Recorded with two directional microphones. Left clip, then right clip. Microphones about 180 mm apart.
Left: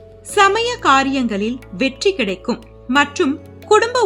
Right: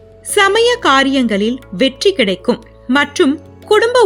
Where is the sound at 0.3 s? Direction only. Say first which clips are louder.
Right 3 dB; 30° right (ahead or behind).